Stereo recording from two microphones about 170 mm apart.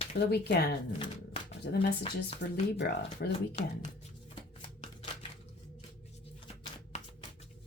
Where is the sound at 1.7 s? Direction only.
80° left.